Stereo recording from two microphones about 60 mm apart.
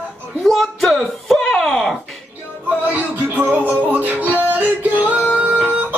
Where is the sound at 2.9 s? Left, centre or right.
Right.